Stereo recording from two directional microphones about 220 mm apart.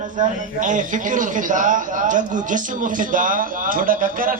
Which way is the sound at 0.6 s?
35° right (ahead or behind).